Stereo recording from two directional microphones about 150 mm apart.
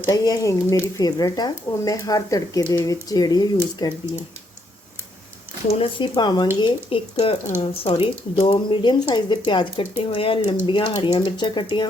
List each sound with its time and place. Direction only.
0.1 s speech: 20° left (ahead or behind)
5.7 s speech: 35° left (ahead or behind)